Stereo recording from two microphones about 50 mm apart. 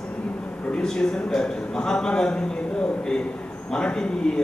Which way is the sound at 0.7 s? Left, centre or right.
Centre.